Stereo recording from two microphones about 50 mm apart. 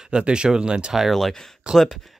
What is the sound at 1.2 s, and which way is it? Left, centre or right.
Speech, centre.